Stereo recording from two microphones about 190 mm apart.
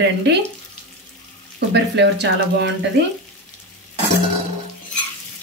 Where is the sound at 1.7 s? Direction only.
65° right (ahead or behind).